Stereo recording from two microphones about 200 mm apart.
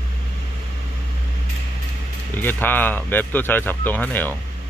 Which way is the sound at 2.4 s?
10° left (ahead or behind).